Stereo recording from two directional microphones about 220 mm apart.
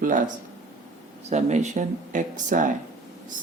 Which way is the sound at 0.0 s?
35° right (ahead or behind).